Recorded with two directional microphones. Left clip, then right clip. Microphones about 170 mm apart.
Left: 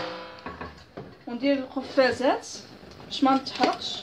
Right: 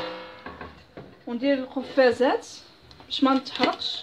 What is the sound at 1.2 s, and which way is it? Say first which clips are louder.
Speech: right 1 dB; 25° right (ahead or behind).